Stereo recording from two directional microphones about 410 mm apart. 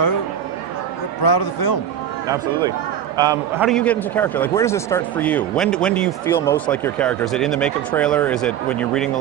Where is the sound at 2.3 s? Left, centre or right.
Centre.